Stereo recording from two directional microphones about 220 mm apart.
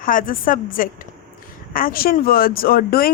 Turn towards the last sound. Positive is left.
turn(degrees=40)  # may be behind; listen again after turning